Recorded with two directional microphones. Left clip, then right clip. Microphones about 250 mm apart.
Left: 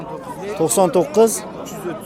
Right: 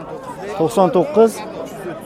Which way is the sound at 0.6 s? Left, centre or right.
Right.